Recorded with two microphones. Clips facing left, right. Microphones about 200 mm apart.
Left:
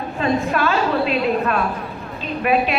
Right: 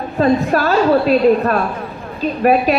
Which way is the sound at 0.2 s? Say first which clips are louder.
Right 5 dB; 40° right (ahead or behind).